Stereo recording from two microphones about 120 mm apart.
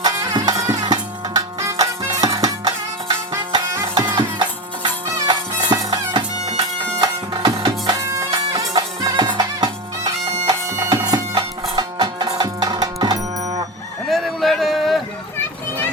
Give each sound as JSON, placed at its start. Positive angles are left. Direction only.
{"t": 0.0, "sound": "music", "side_deg": -35}
{"t": 3.9, "sound": "music", "side_deg": -40}
{"t": 10.4, "sound": "bagpipes", "side_deg": -30}
{"t": 11.8, "sound": "music", "side_deg": -35}
{"t": 14.1, "sound": "a sound", "side_deg": 0}